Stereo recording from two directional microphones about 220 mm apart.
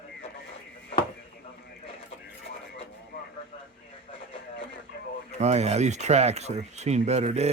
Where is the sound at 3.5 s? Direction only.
25° left (ahead or behind).